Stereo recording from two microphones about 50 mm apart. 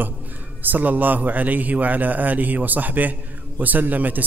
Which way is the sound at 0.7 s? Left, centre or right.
Right.